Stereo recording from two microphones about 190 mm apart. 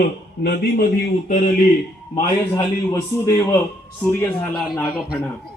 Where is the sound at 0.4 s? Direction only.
55° left (ahead or behind).